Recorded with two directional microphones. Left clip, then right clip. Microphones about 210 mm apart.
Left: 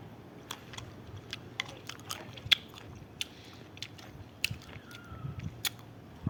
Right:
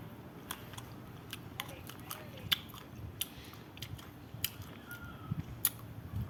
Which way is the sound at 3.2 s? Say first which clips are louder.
Left 4 dB; 25° left (ahead or behind).